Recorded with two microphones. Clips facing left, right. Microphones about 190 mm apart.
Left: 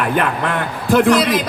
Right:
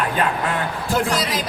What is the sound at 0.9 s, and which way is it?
Speech, 60° left (ahead or behind).